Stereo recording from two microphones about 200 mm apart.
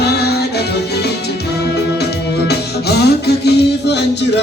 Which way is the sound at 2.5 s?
55° left (ahead or behind).